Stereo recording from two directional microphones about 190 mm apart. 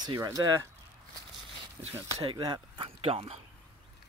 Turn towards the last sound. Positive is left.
turn(degrees=-30)  # may be behind; listen again after turning